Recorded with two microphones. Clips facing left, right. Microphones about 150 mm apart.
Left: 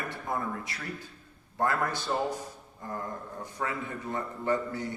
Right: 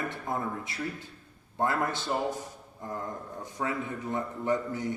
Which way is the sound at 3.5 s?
20° right (ahead or behind).